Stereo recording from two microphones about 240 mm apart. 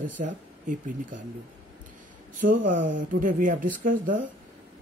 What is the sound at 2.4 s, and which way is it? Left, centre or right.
Speech, right.